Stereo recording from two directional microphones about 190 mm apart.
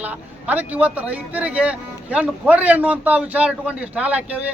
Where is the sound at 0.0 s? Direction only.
10° right (ahead or behind).